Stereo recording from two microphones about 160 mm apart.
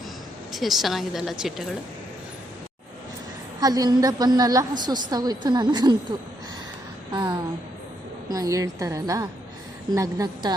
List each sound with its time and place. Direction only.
0.5 s speech: centre (ahead or behind)
3.6 s a woman's voice: 25° right (ahead or behind)